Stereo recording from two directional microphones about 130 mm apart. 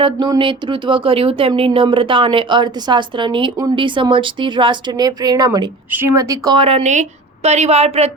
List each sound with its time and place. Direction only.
0.0 s speech: 40° right (ahead or behind)
6.6 s speech: 45° right (ahead or behind)
6.8 s a woman's voice: 65° right (ahead or behind)